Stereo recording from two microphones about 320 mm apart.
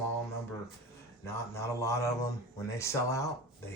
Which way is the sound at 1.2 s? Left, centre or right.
Centre.